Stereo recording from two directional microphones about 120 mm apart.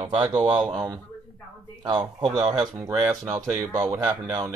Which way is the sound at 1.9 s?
40° right (ahead or behind).